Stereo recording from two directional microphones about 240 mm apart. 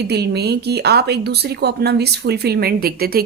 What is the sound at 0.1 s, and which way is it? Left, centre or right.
Speech, right.